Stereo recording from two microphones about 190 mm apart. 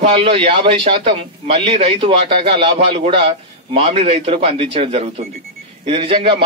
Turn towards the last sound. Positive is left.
turn(degrees=-25)  # may be behind; listen again after turning